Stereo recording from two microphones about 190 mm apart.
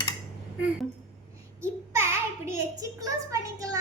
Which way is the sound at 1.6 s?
15° right (ahead or behind).